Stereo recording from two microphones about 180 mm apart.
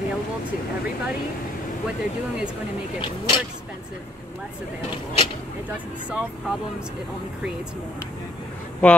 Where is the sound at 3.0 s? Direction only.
25° left (ahead or behind).